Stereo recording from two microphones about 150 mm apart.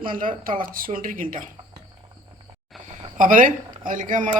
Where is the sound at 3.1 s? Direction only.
65° right (ahead or behind).